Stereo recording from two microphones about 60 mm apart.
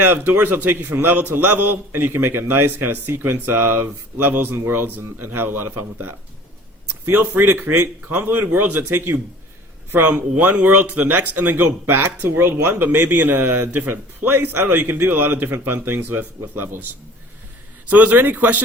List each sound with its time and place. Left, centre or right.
0.0 s a man's voice: right
17.8 s a man's voice: right